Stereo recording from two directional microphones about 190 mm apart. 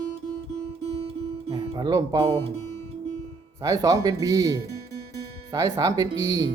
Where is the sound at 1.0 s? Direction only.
30° right (ahead or behind).